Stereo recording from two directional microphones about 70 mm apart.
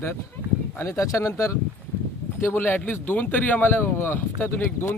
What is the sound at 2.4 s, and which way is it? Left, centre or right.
Speech, left.